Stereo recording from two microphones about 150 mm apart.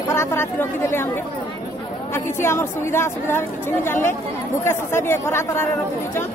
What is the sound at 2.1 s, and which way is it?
Speech, 15° left (ahead or behind).